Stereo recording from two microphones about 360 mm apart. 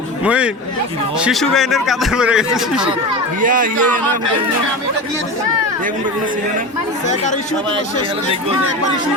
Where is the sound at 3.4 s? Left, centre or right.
Right.